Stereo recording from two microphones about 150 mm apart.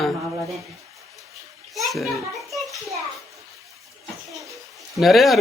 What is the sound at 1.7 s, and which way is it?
Children playing, centre (ahead or behind).